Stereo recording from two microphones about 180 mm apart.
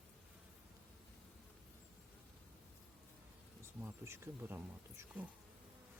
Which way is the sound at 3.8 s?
15° right (ahead or behind).